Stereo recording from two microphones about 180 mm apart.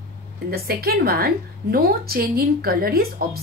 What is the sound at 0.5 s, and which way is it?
A woman's voice, 60° right (ahead or behind).